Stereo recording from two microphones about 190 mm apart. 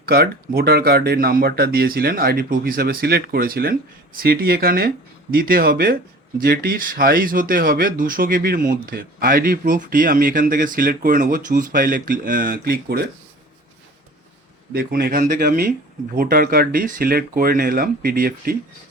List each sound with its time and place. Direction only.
0.0 s speech: 50° right (ahead or behind)
14.7 s speech: 55° right (ahead or behind)